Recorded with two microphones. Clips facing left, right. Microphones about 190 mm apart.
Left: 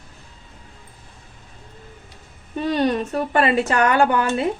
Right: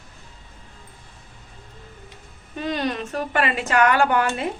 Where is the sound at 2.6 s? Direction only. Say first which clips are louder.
Left 5 dB; 35° left (ahead or behind).